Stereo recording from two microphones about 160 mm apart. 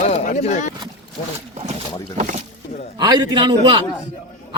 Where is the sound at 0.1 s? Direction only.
45° left (ahead or behind).